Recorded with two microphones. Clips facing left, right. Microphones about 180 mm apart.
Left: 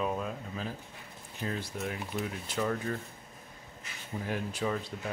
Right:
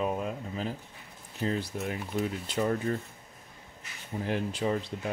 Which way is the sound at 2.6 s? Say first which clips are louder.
Right 3 dB; 30° right (ahead or behind).